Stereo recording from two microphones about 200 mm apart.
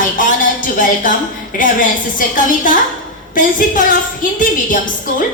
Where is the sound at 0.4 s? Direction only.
40° left (ahead or behind).